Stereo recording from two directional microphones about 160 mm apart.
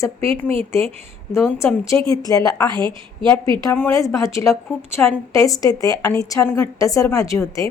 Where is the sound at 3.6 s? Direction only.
15° left (ahead or behind).